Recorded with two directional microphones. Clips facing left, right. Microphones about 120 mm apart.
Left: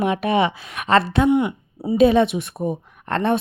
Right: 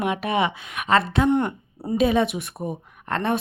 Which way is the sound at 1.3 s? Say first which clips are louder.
Left 3 dB; 10° left (ahead or behind).